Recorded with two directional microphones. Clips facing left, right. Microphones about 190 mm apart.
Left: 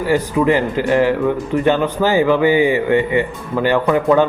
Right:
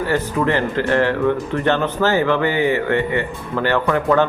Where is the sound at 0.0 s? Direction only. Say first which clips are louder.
Left 3 dB; 10° left (ahead or behind).